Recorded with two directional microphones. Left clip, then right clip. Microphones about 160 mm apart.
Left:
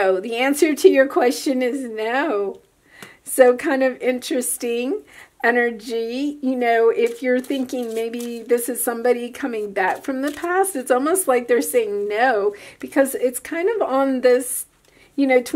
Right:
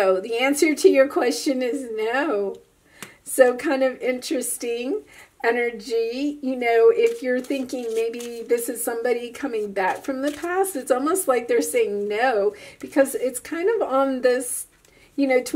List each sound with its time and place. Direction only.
0.0 s a woman's voice: 25° left (ahead or behind)